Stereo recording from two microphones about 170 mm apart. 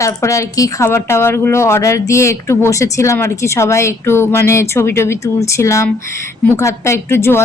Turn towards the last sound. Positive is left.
turn(degrees=15)  # may be behind; listen again after turning